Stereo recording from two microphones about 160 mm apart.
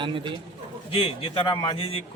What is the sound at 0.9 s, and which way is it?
A man's voice, 35° left (ahead or behind).